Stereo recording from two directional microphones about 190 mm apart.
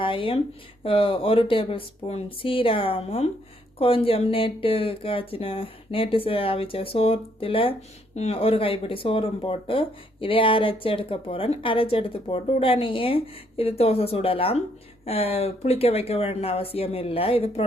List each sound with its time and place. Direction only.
0.0 s speech: 25° left (ahead or behind)